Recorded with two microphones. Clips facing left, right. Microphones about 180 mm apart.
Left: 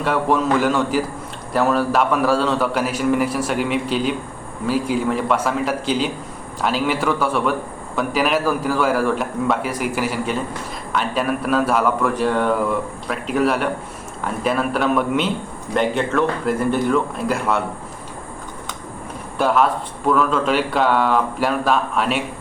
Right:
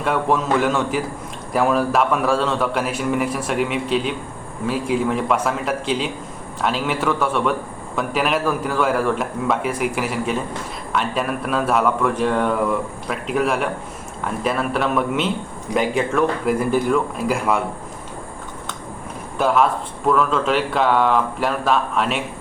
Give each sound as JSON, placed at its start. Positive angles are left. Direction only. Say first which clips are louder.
{"t": 0.0, "sound": "a man's voice", "louder": "left 1 dB", "side_deg": 0}
{"t": 20.1, "sound": "a man's voice", "louder": "even", "side_deg": 0}